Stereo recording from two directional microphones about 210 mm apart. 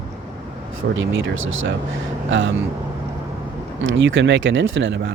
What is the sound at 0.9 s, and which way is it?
Speech, 65° right (ahead or behind).